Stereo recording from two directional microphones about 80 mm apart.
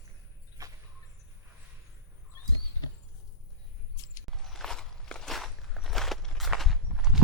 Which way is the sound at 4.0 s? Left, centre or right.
Left.